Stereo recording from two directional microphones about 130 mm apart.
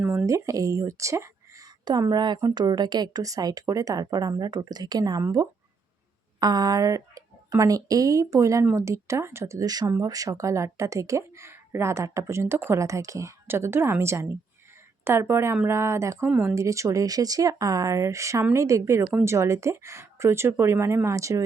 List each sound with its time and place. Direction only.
0.0 s a sound: 10° right (ahead or behind)
0.3 s speech: 25° right (ahead or behind)
6.4 s speech: 30° right (ahead or behind)